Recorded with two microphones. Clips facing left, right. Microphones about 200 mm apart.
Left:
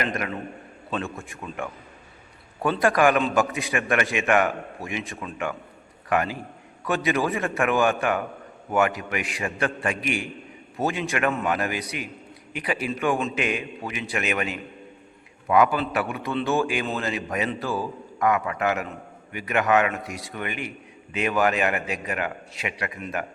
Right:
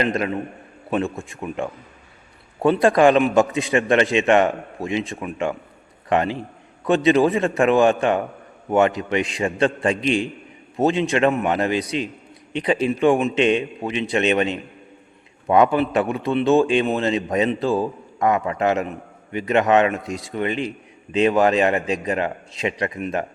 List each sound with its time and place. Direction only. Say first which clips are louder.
0.0 s a man's voice: right 6 dB; 25° right (ahead or behind)